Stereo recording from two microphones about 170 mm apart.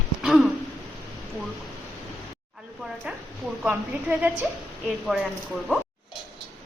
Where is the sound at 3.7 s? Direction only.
10° right (ahead or behind).